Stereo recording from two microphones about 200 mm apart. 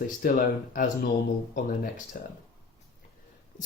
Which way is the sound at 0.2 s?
45° left (ahead or behind).